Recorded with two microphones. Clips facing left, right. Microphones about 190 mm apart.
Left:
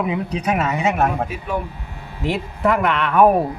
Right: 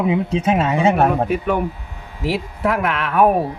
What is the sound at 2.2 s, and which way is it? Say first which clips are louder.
Speech: even; centre (ahead or behind).